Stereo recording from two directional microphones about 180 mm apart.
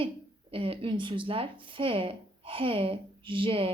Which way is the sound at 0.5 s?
30° right (ahead or behind).